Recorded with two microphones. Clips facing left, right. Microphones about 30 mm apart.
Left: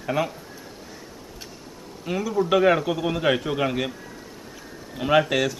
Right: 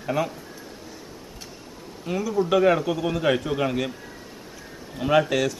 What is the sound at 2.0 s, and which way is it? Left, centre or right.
A man's voice, centre.